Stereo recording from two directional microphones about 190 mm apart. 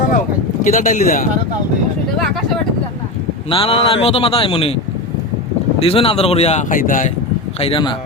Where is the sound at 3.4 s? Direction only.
30° left (ahead or behind).